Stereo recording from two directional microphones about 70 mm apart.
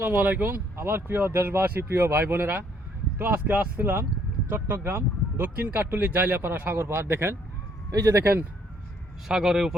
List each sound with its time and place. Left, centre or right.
0.0 s speech: right
7.9 s speech: right
9.3 s speech: centre